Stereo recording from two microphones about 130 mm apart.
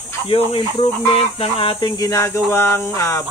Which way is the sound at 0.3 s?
45° left (ahead or behind).